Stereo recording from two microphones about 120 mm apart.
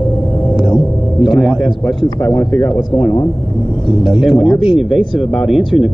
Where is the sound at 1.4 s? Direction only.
Centre (ahead or behind).